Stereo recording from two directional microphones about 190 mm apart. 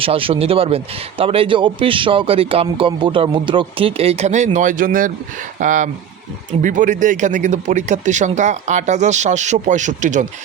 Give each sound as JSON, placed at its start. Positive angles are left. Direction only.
{"t": 0.0, "sound": "speech", "side_deg": -30}